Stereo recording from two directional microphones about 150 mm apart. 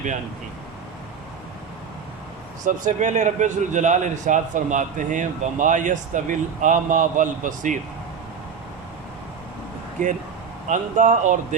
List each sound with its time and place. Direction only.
2.6 s a man's voice: 55° right (ahead or behind)
10.7 s a man's voice: 55° right (ahead or behind)